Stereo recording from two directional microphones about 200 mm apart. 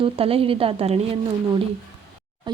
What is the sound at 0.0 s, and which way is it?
Speech, 30° right (ahead or behind).